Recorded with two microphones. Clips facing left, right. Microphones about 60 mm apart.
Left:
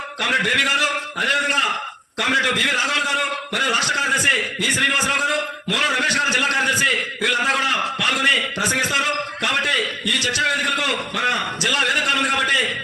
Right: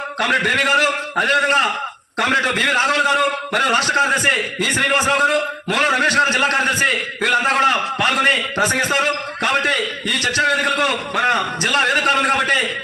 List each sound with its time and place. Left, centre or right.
0.2 s a man's voice: right